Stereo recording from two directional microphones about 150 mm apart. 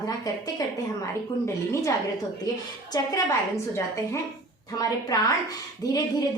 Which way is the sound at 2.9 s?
25° left (ahead or behind).